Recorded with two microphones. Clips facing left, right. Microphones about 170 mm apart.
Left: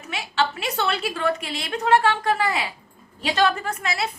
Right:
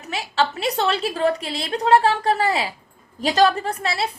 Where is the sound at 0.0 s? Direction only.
35° right (ahead or behind).